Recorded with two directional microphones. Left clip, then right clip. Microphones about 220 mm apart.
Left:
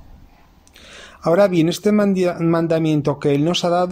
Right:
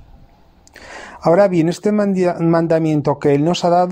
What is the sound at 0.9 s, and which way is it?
Speech, 15° right (ahead or behind).